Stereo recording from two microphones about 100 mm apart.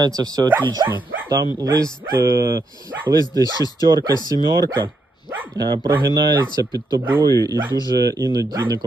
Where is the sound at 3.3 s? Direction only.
40° right (ahead or behind).